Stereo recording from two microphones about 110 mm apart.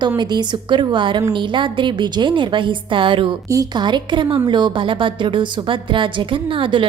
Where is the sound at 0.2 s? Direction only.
40° right (ahead or behind).